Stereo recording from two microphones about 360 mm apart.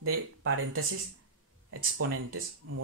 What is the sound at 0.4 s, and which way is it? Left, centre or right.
Speech, right.